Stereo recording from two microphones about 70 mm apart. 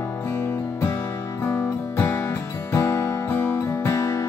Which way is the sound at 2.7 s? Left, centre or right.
Left.